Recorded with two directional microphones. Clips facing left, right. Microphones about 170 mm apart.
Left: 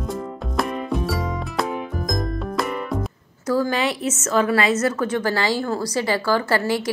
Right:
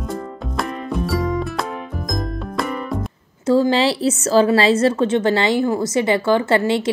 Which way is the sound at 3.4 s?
25° right (ahead or behind).